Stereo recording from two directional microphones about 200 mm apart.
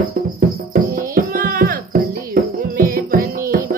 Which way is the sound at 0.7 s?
45° right (ahead or behind).